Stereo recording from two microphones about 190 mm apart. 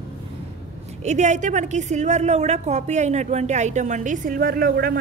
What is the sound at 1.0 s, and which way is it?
A woman's voice, 40° right (ahead or behind).